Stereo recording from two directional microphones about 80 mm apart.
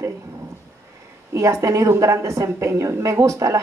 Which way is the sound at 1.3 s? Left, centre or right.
Right.